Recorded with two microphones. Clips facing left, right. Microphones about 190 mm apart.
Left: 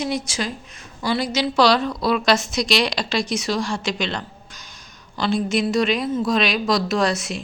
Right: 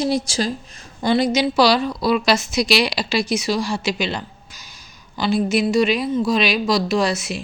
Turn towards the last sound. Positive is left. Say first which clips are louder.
# right 1 dB
turn(degrees=0)  # may be behind; listen again after turning